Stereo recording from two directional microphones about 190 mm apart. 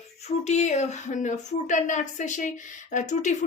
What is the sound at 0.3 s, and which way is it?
Speech, 35° left (ahead or behind).